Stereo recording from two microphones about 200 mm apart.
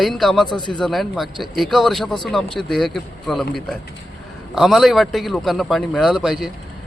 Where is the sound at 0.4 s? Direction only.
20° left (ahead or behind).